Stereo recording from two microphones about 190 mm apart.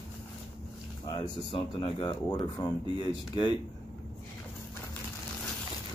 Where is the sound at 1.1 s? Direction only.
25° left (ahead or behind).